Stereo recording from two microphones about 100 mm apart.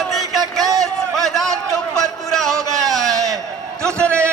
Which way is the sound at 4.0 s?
10° left (ahead or behind).